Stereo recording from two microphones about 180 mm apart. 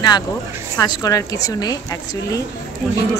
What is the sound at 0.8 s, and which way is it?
Speech, 20° left (ahead or behind).